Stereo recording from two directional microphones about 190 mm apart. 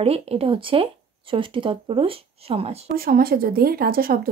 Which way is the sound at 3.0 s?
50° right (ahead or behind).